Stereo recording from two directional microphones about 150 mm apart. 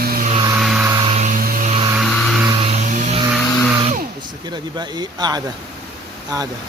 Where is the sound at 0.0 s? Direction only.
80° right.